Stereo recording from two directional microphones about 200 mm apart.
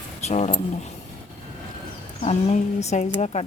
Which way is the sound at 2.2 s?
30° left (ahead or behind).